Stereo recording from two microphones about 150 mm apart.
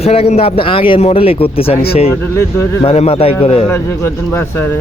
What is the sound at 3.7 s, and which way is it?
Speech, 15° left (ahead or behind).